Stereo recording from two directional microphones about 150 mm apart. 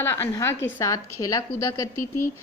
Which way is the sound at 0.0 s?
15° left (ahead or behind).